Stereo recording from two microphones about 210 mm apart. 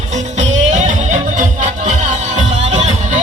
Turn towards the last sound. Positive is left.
turn(degrees=-35)  # may be behind; listen again after turning